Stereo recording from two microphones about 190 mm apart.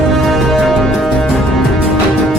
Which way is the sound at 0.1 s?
Centre (ahead or behind).